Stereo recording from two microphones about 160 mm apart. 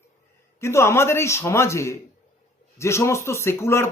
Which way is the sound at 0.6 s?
15° left (ahead or behind).